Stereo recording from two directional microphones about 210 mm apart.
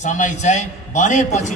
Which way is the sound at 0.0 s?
35° left (ahead or behind).